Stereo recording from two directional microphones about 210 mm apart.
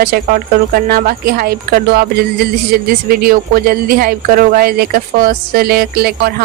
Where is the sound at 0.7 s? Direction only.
45° right (ahead or behind).